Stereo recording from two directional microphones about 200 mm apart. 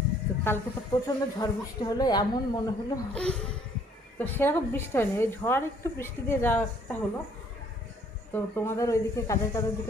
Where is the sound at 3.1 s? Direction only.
5° left (ahead or behind).